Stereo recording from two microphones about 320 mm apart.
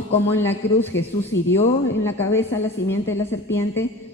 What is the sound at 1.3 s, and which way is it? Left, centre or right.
Speech, left.